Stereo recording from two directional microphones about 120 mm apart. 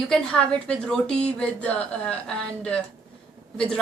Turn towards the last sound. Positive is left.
turn(degrees=5)  # may be behind; listen again after turning